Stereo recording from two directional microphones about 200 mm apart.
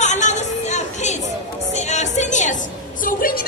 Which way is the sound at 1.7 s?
35° left (ahead or behind).